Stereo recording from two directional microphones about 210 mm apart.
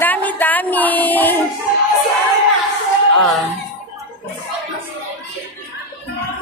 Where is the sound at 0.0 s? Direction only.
10° left (ahead or behind).